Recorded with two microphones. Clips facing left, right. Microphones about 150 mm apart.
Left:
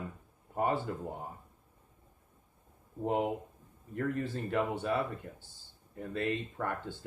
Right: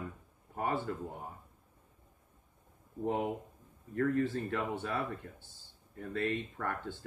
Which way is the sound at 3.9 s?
20° left (ahead or behind).